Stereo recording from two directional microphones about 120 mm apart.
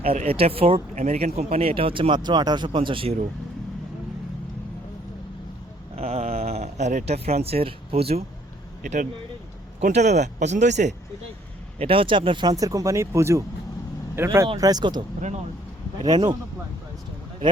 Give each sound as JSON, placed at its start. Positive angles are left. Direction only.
{"t": 0.0, "sound": "speech", "side_deg": -55}
{"t": 0.9, "sound": "speech", "side_deg": -70}
{"t": 6.0, "sound": "a sound", "side_deg": -60}
{"t": 8.8, "sound": "speech", "side_deg": -90}
{"t": 9.8, "sound": "speech", "side_deg": -75}
{"t": 11.8, "sound": "speech", "side_deg": -50}
{"t": 14.6, "sound": "speech", "side_deg": -35}
{"t": 16.0, "sound": "speech", "side_deg": -40}